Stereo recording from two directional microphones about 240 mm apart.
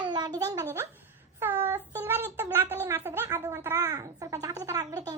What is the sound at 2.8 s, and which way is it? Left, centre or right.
A child's voice, centre.